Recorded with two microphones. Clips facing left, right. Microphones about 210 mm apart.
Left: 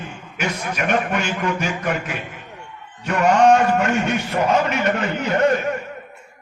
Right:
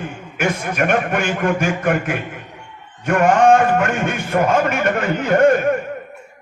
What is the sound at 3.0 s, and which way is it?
A man's voice, 50° right (ahead or behind).